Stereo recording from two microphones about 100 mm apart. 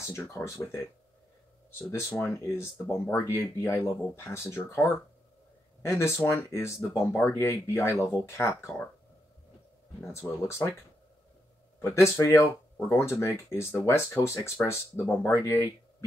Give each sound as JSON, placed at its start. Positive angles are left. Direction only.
{"t": 0.0, "sound": "speech", "side_deg": 30}
{"t": 1.8, "sound": "speech", "side_deg": 25}
{"t": 10.4, "sound": "speech", "side_deg": 25}
{"t": 11.8, "sound": "speech", "side_deg": 30}